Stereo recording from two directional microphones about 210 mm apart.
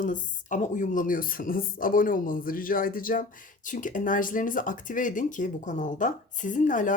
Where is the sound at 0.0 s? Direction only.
40° left (ahead or behind).